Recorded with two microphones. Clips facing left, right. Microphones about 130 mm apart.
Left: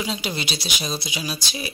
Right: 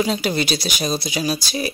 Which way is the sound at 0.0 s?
45° right (ahead or behind).